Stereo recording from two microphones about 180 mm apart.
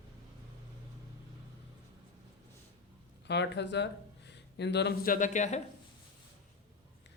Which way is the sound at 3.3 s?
75° left (ahead or behind).